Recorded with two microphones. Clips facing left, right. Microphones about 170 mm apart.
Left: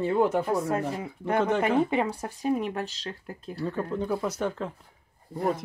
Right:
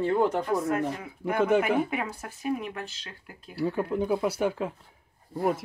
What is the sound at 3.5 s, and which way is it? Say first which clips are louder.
Speech: right 3 dB; 10° right (ahead or behind).